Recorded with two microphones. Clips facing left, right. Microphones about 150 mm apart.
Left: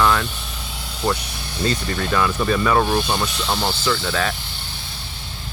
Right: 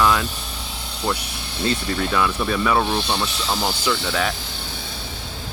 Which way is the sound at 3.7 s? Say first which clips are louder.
Left 1 dB; 10° right (ahead or behind).